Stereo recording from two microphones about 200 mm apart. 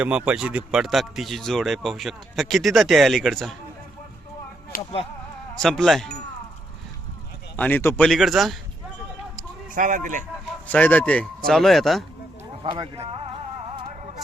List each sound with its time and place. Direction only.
0.0 s speech: 5° right (ahead or behind)
5.5 s speech: 5° left (ahead or behind)
7.5 s speech: 10° left (ahead or behind)
9.7 s speech: 40° right (ahead or behind)
10.7 s speech: 10° left (ahead or behind)
12.7 s speech: 25° right (ahead or behind)